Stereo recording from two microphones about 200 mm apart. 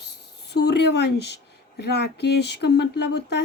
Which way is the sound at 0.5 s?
55° left (ahead or behind).